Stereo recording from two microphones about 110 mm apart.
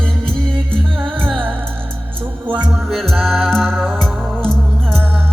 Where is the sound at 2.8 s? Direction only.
Centre (ahead or behind).